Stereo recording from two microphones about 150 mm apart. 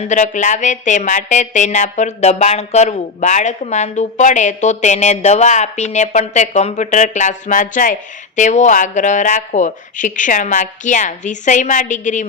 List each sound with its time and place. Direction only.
0.0 s speech: 50° left (ahead or behind)